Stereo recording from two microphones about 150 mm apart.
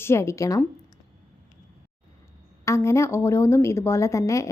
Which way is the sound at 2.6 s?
20° left (ahead or behind).